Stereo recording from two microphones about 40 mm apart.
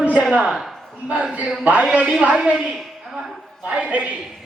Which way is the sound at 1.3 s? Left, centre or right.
Right.